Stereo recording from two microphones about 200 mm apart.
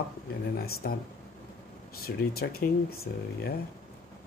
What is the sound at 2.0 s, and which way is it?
Speech, 50° left (ahead or behind).